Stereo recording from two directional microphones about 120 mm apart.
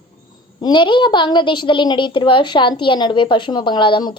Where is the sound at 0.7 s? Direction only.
45° left (ahead or behind).